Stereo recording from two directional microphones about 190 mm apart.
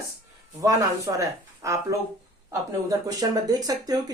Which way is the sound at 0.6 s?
15° right (ahead or behind).